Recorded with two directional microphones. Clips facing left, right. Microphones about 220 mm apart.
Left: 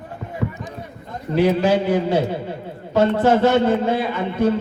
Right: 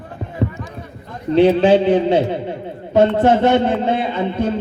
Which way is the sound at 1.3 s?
25° right (ahead or behind).